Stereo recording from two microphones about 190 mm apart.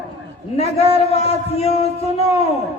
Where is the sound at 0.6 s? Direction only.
30° left (ahead or behind).